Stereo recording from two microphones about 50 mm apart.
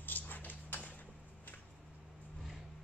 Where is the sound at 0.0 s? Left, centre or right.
Left.